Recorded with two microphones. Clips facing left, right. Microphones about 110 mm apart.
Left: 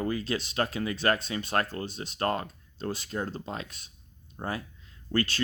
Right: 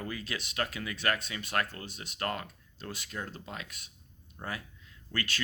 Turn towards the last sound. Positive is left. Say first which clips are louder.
# left 8 dB
turn(degrees=30)  # may be behind; listen again after turning